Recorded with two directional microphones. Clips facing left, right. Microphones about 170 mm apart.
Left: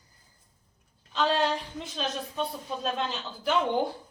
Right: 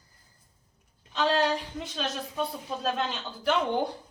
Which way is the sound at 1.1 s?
Centre (ahead or behind).